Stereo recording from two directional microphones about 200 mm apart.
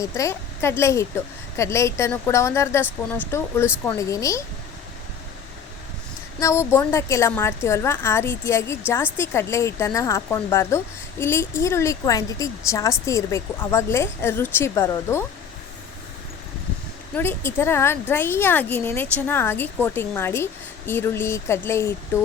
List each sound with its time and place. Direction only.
0.0 s a woman's voice: 15° left (ahead or behind)
6.4 s a woman's voice: 15° left (ahead or behind)
17.2 s a woman's voice: 10° left (ahead or behind)